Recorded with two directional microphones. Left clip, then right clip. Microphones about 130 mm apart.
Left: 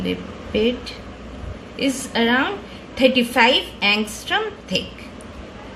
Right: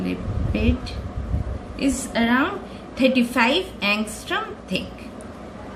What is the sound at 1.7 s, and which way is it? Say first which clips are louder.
A woman's voice: left 2 dB; 50° left (ahead or behind).